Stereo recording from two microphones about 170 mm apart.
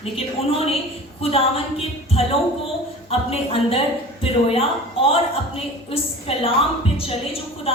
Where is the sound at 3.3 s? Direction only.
35° left (ahead or behind).